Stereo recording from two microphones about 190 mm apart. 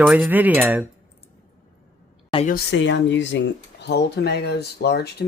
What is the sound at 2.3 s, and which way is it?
Speech, 25° left (ahead or behind).